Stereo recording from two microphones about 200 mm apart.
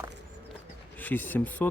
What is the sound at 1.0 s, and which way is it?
Speech, 10° left (ahead or behind).